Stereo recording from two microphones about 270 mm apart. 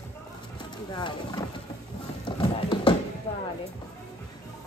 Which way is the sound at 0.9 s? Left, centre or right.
Centre.